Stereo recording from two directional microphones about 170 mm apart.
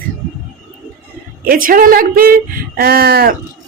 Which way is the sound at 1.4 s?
60° right (ahead or behind).